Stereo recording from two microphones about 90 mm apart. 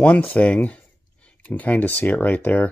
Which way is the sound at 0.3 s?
15° left (ahead or behind).